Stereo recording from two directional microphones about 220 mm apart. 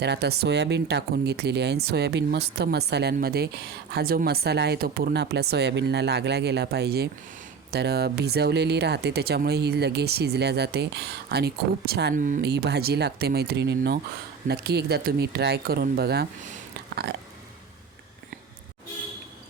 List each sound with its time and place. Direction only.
0.0 s speech: 50° right (ahead or behind)
12.1 s speech: 35° right (ahead or behind)
16.4 s a sound: 40° right (ahead or behind)